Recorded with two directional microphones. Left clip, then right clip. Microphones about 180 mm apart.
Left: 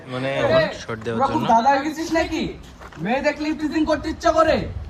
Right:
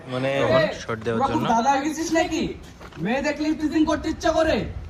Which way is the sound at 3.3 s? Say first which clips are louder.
Left 1 dB; 30° left (ahead or behind).